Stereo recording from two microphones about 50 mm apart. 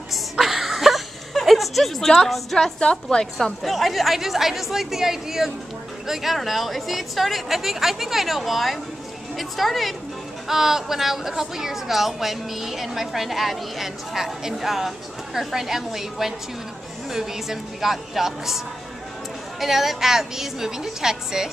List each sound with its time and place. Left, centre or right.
0.1 s a sound: centre
2.8 s a woman's voice: centre
3.6 s a woman's voice: centre
19.6 s a woman's voice: centre